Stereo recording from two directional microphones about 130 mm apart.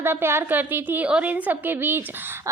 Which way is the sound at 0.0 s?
15° right (ahead or behind).